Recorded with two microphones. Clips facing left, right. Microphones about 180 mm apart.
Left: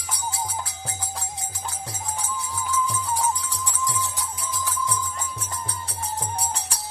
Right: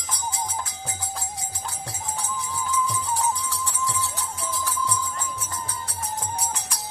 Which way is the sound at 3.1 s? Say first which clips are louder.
Even; 15° left (ahead or behind).